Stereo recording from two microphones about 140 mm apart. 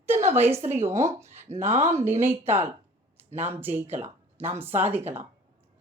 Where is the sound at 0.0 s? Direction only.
15° right (ahead or behind).